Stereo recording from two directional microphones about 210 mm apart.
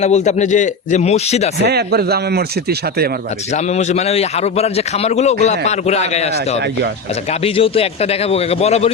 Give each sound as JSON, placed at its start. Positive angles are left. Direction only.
{"t": 0.0, "sound": "a man's voice", "side_deg": 35}
{"t": 1.6, "sound": "speech", "side_deg": -50}
{"t": 3.5, "sound": "a man's voice", "side_deg": 30}